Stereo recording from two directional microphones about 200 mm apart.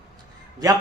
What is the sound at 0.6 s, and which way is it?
Speech, 20° right (ahead or behind).